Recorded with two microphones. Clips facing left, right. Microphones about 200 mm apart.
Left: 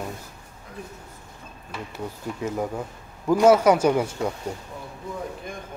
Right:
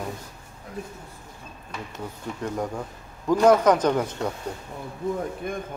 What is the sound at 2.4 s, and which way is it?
Speech, 5° left (ahead or behind).